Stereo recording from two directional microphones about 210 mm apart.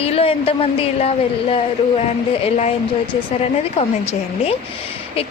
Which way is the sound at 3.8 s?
30° left (ahead or behind).